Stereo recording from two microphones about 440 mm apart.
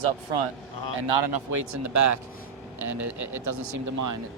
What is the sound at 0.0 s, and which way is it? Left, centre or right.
Speech, right.